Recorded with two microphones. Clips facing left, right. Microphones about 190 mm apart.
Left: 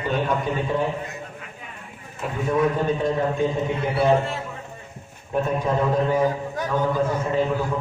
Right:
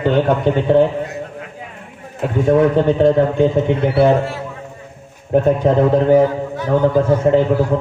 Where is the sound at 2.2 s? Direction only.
70° right (ahead or behind).